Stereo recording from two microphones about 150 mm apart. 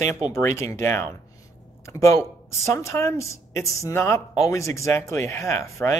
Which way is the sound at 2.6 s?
20° left (ahead or behind).